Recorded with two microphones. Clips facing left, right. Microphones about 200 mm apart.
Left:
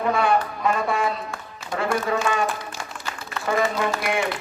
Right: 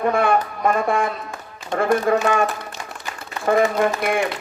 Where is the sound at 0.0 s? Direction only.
50° right (ahead or behind).